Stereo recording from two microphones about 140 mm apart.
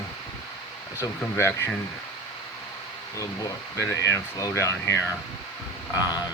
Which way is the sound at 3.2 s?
25° left (ahead or behind).